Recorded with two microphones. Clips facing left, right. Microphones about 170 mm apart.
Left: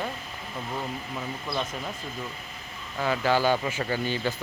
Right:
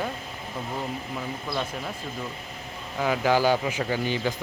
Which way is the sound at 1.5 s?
10° right (ahead or behind).